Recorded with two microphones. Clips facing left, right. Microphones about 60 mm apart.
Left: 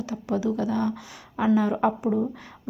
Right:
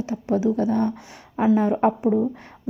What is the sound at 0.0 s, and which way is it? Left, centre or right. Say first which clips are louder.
A woman's voice: right 4 dB; right.